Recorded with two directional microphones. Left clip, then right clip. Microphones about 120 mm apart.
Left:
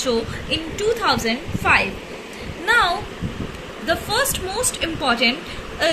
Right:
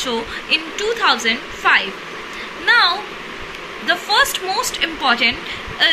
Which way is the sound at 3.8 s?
55° left (ahead or behind).